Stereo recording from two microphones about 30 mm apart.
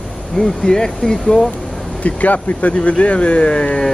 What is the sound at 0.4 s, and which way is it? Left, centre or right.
Speech, left.